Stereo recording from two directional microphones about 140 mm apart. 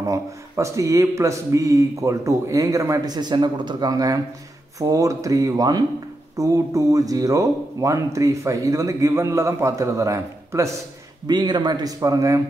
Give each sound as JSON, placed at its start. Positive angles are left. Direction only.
{"t": 0.0, "sound": "speech", "side_deg": -20}